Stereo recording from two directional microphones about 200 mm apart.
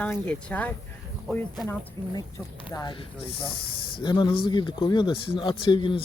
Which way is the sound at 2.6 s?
25° left (ahead or behind).